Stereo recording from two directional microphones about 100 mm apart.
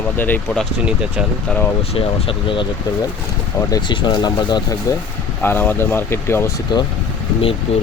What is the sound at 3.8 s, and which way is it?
Speech, 45° left (ahead or behind).